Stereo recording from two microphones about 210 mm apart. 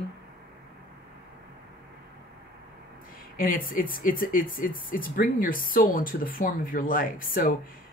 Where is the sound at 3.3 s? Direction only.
40° left (ahead or behind).